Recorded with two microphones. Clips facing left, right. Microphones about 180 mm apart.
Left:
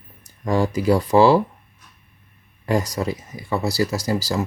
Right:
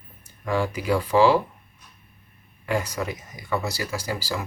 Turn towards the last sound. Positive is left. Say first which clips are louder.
# left 6 dB
turn(degrees=40)  # may be behind; listen again after turning